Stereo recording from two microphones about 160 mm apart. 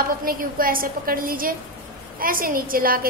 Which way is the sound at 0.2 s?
60° right (ahead or behind).